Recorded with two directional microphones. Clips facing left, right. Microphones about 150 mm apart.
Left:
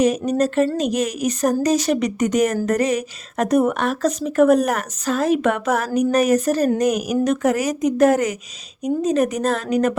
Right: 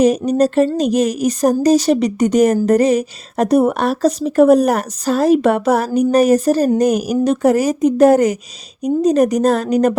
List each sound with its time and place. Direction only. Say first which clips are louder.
0.0 s a woman's voice: right 5 dB; 35° right (ahead or behind)